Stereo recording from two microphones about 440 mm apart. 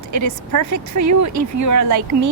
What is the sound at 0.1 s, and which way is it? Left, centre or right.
A woman's voice, right.